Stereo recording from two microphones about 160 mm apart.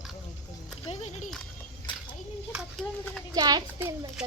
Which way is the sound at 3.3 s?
25° right (ahead or behind).